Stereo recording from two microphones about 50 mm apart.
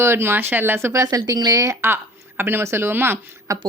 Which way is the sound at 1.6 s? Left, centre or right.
Right.